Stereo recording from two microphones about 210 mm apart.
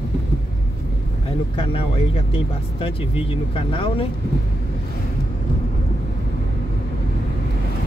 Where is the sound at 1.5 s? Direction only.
25° left (ahead or behind).